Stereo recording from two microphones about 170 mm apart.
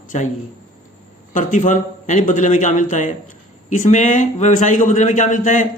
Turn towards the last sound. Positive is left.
turn(degrees=50)  # may be behind; listen again after turning